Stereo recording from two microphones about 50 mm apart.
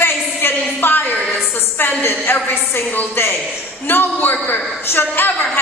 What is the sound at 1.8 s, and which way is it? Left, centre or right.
Speech, left.